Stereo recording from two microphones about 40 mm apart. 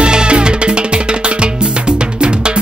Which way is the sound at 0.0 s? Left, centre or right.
Right.